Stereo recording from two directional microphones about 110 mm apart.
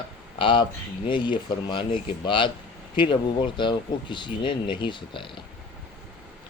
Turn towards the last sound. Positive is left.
turn(degrees=45)  # may be behind; listen again after turning